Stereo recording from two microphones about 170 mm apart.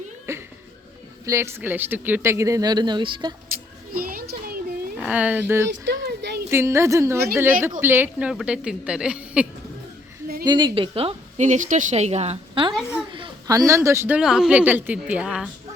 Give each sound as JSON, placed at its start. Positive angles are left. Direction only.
{"t": 0.3, "sound": "a sound", "side_deg": -15}
{"t": 1.2, "sound": "speech", "side_deg": -15}
{"t": 4.0, "sound": "a sound", "side_deg": -60}
{"t": 4.9, "sound": "speech", "side_deg": -10}
{"t": 5.6, "sound": "a sound", "side_deg": -90}
{"t": 6.5, "sound": "speech", "side_deg": -15}
{"t": 10.4, "sound": "a woman's voice", "side_deg": -25}
{"t": 12.7, "sound": "a woman's voice", "side_deg": -5}
{"t": 13.1, "sound": "speech", "side_deg": -30}
{"t": 14.2, "sound": "speech", "side_deg": -5}